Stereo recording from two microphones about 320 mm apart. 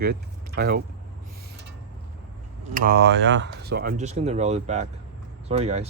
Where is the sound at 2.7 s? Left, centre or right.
Right.